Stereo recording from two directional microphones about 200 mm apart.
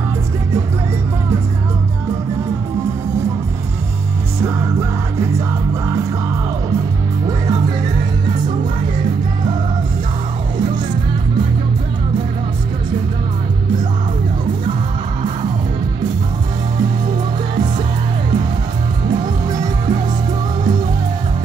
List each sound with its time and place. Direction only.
19.0 s music: 20° right (ahead or behind)